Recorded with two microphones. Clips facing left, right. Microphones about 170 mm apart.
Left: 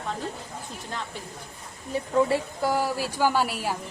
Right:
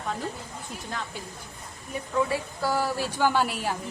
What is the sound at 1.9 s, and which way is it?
Speech, 30° left (ahead or behind).